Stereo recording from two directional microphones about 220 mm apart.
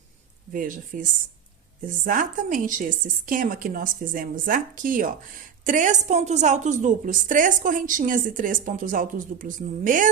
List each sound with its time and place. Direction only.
0.5 s a woman's voice: 40° right (ahead or behind)
2.0 s a woman's voice: 40° right (ahead or behind)